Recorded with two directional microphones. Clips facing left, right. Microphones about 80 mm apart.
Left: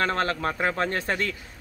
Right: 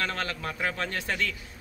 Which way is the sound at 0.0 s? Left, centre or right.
Left.